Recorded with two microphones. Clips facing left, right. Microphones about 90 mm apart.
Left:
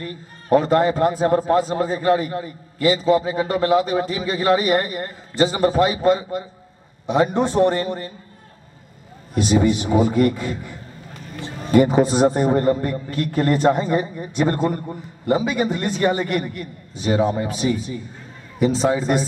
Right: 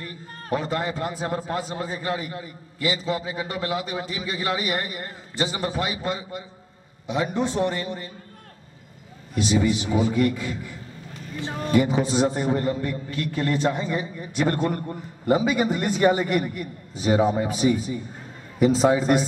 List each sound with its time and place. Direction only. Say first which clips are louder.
0.5 s a man's voice: left 10 dB; 45° left (ahead or behind)
9.3 s a man's voice: left 4 dB; 45° left (ahead or behind)
14.6 s a man's voice: left 3 dB; 5° left (ahead or behind)
15.2 s a man's voice: left 1 dB; 5° right (ahead or behind)